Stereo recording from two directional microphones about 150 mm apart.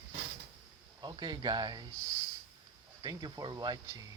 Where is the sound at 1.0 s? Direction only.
30° right (ahead or behind).